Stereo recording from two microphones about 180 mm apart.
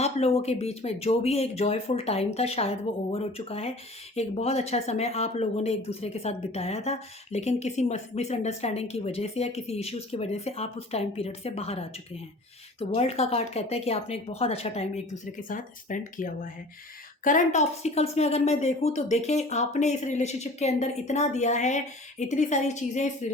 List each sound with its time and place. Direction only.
0.0 s speech: 35° left (ahead or behind)